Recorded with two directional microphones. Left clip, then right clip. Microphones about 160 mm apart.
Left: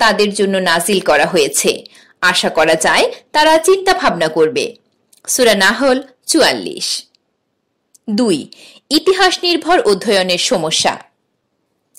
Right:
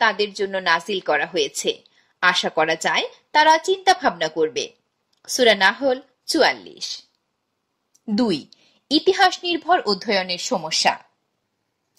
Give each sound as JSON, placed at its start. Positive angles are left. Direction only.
{"t": 0.0, "sound": "a woman's voice", "side_deg": 55}
{"t": 10.6, "sound": "speech", "side_deg": 35}